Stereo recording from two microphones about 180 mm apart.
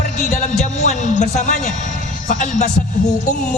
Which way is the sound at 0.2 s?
40° left (ahead or behind).